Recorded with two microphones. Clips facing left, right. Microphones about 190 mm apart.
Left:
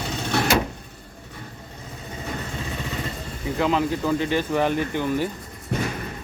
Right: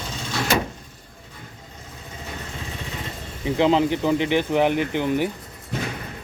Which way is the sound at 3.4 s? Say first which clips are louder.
Right 4 dB; 25° right (ahead or behind).